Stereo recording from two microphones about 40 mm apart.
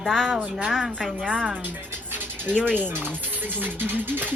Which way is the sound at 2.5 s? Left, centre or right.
Left.